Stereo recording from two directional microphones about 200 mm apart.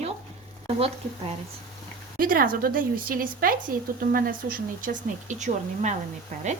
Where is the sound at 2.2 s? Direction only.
45° right (ahead or behind).